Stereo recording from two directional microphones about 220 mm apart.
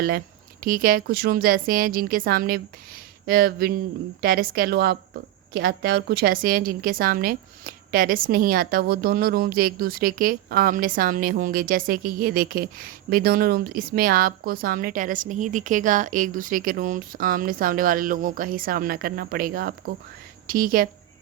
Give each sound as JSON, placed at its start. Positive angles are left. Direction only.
{"t": 0.6, "sound": "a woman's voice", "side_deg": -40}